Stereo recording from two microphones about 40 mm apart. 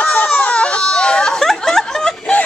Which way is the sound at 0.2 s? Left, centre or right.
Left.